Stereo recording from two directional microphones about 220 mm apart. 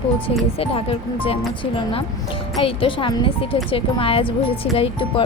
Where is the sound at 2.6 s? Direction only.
25° left (ahead or behind).